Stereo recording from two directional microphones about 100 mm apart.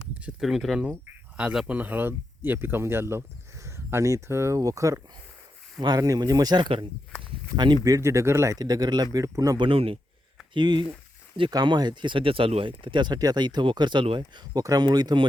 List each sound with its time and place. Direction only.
0.2 s speech: 15° right (ahead or behind)
0.4 s speech: centre (ahead or behind)
0.9 s speech: 15° right (ahead or behind); by 7.8 s 50° right (ahead or behind)
7.9 s speech: 30° right (ahead or behind)
8.5 s speech: 40° right (ahead or behind)
9.6 s speech: 65° right (ahead or behind)
10.5 s speech: 50° right (ahead or behind)
14.2 s speech: 40° right (ahead or behind)